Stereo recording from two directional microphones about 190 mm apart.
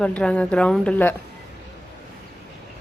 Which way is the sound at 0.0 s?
5° left (ahead or behind).